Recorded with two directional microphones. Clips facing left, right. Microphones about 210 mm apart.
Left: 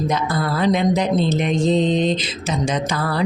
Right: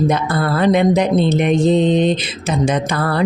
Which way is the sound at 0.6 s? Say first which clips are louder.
Right 4 dB; 60° right (ahead or behind).